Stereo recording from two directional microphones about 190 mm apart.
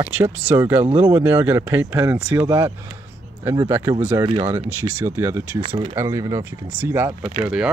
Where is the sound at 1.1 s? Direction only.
10° right (ahead or behind).